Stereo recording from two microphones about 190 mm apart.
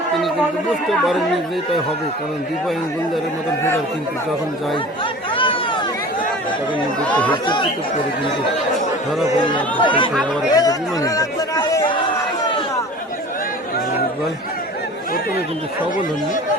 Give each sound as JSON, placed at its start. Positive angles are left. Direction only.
{"t": 0.9, "sound": "speech", "side_deg": 0}
{"t": 5.4, "sound": "chatter", "side_deg": 25}
{"t": 7.4, "sound": "speech", "side_deg": 25}
{"t": 9.8, "sound": "speech", "side_deg": 25}